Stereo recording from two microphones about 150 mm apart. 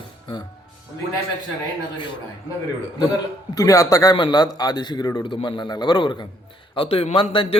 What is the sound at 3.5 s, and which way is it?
A man's voice, 20° left (ahead or behind).